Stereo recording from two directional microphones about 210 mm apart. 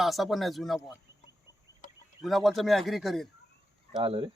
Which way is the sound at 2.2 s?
Centre (ahead or behind).